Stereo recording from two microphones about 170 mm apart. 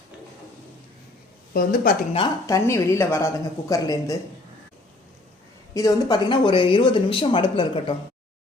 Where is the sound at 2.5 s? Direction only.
20° left (ahead or behind).